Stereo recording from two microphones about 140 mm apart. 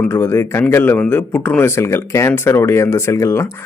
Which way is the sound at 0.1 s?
20° left (ahead or behind).